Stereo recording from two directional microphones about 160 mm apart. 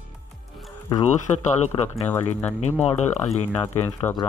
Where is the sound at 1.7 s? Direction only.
30° left (ahead or behind).